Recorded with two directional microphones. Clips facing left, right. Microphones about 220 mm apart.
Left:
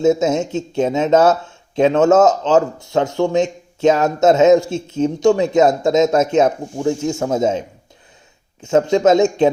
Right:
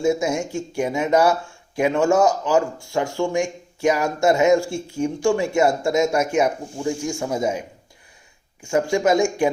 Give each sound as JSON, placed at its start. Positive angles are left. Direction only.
{"t": 0.0, "sound": "speech", "side_deg": 20}
{"t": 8.6, "sound": "speech", "side_deg": 20}